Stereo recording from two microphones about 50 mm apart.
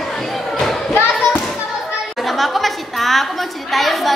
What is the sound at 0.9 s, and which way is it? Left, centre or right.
Basketball bounce, left.